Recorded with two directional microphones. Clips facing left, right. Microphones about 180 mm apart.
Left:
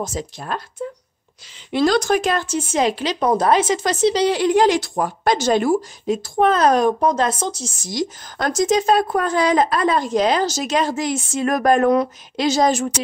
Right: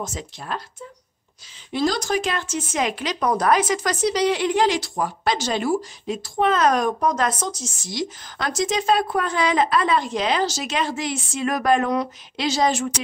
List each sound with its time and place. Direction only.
0.0 s speech: 40° left (ahead or behind)
1.7 s speech: 65° left (ahead or behind)
2.3 s a woman's voice: 30° left (ahead or behind)